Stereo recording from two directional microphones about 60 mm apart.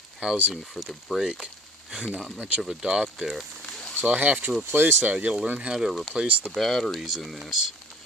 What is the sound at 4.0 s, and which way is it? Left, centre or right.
Speech, right.